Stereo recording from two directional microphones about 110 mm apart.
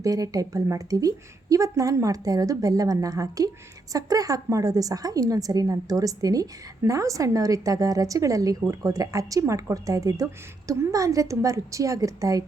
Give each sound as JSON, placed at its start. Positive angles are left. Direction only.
{"t": 0.0, "sound": "a woman's voice", "side_deg": -30}